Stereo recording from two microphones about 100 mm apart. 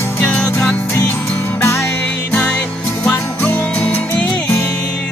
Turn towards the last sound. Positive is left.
turn(degrees=15)  # may be behind; listen again after turning